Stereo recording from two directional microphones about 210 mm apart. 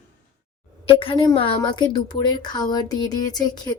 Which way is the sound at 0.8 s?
25° left (ahead or behind).